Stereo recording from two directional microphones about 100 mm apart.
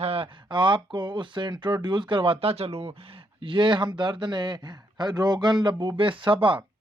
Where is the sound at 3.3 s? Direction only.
55° right (ahead or behind).